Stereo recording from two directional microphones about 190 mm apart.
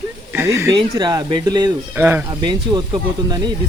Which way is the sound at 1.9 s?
10° right (ahead or behind).